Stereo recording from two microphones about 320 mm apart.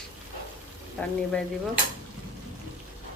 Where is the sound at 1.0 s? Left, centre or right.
Centre.